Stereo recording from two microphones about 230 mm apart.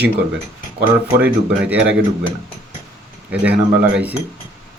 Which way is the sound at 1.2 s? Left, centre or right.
Centre.